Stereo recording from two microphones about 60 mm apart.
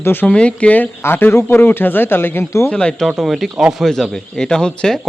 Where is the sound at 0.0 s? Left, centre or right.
Left.